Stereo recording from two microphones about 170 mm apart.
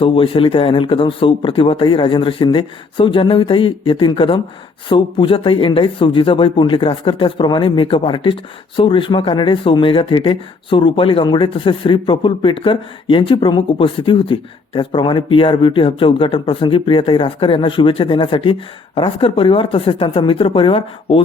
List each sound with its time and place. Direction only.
0.0 s speech: 30° left (ahead or behind)